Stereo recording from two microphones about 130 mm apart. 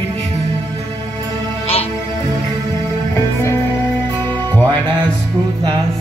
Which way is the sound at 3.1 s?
20° left (ahead or behind).